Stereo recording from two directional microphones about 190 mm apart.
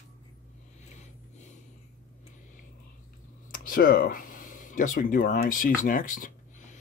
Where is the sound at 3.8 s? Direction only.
50° left (ahead or behind).